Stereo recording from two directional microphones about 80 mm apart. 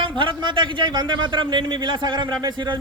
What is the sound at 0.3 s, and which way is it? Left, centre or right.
A man's voice, right.